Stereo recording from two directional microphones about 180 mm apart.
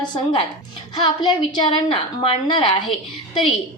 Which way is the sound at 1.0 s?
25° left (ahead or behind).